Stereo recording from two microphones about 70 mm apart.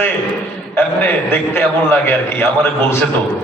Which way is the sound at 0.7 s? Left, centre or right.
Left.